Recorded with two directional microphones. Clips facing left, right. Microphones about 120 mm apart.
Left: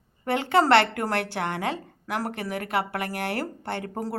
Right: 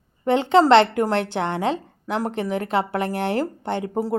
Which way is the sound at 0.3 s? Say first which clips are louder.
Right 5 dB; 20° right (ahead or behind).